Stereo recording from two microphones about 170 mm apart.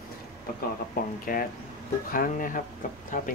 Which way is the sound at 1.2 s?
55° left (ahead or behind).